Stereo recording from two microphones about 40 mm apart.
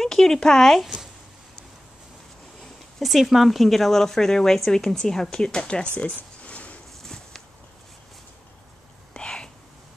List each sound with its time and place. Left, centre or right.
0.0 s speech: centre
3.0 s speech: centre; by 5.9 s left
5.9 s a sound: left
7.0 s walk: centre
9.1 s whispering: left